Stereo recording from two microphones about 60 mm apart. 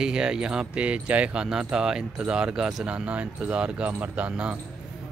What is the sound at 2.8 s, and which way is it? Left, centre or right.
Speech, centre.